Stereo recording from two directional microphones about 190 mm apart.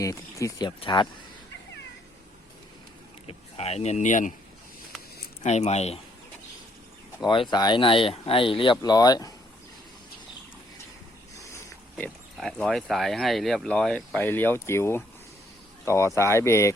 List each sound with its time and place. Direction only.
0.0 s speech: 15° left (ahead or behind)
3.2 s speech: 35° left (ahead or behind)
5.4 s speech: 35° left (ahead or behind)
7.5 s speech: 20° left (ahead or behind)
11.5 s speech: 5° left (ahead or behind)